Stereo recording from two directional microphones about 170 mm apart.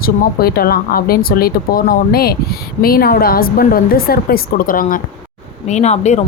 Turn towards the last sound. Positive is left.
turn(degrees=40)  # may be behind; listen again after turning